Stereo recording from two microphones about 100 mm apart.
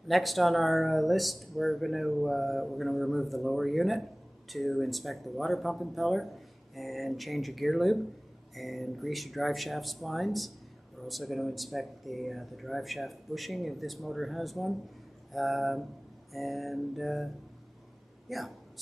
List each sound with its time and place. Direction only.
0.1 s speech: centre (ahead or behind)
18.3 s speech: centre (ahead or behind)